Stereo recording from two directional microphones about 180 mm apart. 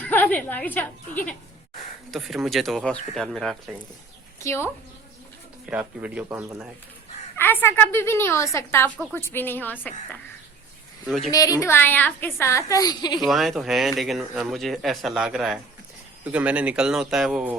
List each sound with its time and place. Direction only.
0.0 s a woman's voice: 10° left (ahead or behind)
2.0 s speech: centre (ahead or behind)
4.4 s a woman's voice: 15° left (ahead or behind)
5.6 s speech: 5° right (ahead or behind)
7.3 s a woman's voice: 10° left (ahead or behind)
11.3 s a child's voice: 20° left (ahead or behind)
13.1 s speech: centre (ahead or behind)